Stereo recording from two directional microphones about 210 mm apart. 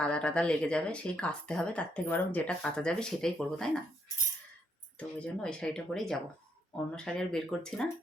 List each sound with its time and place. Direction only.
0.0 s speech: 5° left (ahead or behind)
4.9 s speech: 5° left (ahead or behind)